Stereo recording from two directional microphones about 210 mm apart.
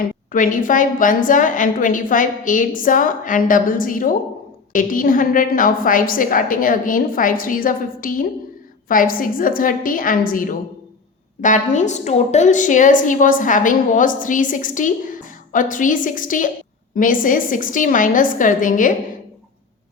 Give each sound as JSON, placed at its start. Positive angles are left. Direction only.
{"t": 0.0, "sound": "a woman's voice", "side_deg": 40}